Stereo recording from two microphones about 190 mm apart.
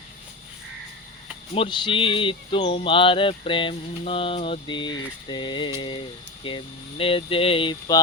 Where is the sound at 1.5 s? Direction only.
30° left (ahead or behind).